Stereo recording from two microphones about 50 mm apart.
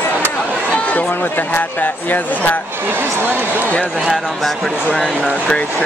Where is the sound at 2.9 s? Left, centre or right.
Right.